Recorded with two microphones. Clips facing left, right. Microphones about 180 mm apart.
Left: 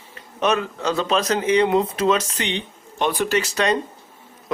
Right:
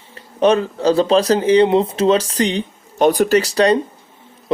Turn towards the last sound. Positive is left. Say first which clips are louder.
# right 7 dB
turn(degrees=-35)  # may be behind; listen again after turning